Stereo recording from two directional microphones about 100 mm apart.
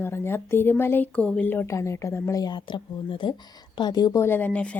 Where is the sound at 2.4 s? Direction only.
45° left (ahead or behind).